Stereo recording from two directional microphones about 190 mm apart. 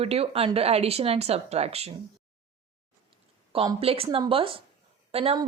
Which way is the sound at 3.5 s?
30° right (ahead or behind).